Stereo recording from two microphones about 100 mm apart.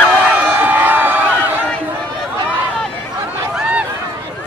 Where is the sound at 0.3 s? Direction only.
15° right (ahead or behind).